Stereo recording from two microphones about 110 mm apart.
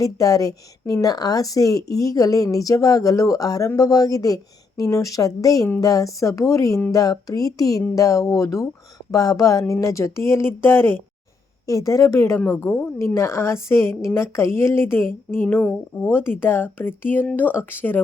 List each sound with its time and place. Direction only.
0.0 s a woman's voice: 30° left (ahead or behind)